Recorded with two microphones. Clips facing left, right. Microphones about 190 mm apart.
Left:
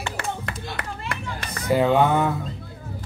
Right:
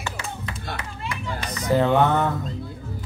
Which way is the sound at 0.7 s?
60° left (ahead or behind).